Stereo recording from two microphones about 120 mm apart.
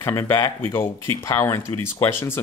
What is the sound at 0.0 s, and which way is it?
Speech, 20° left (ahead or behind).